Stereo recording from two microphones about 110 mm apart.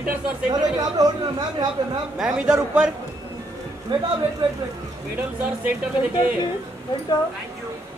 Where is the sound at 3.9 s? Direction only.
50° right (ahead or behind).